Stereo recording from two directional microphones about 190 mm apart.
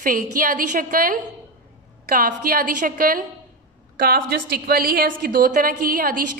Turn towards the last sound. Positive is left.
turn(degrees=-45)  # may be behind; listen again after turning